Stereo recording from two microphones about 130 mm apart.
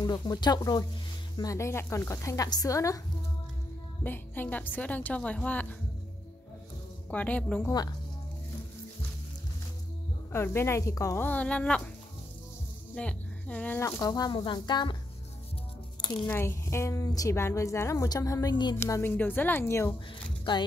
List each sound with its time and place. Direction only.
0.0 s a woman's voice: 30° left (ahead or behind)
4.0 s a woman's voice: 15° left (ahead or behind)
7.1 s a woman's voice: 10° left (ahead or behind)
10.3 s a woman's voice: 20° left (ahead or behind)
11.2 s a woman's voice: 10° left (ahead or behind)
12.9 s speech: 10° left (ahead or behind)
13.7 s speech: 25° left (ahead or behind)
16.0 s a sound: 40° left (ahead or behind)
16.3 s a woman's voice: 20° left (ahead or behind); by 18.8 s 35° left (ahead or behind)
18.8 s a woman's voice: 20° left (ahead or behind)